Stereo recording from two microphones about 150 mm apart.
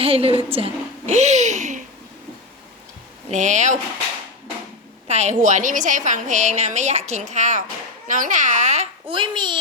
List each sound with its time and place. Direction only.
0.0 s a sound: 40° right (ahead or behind)
3.2 s a woman's voice: 55° right (ahead or behind)
5.0 s a woman's voice: 45° right (ahead or behind)
9.1 s a child's voice: 30° right (ahead or behind)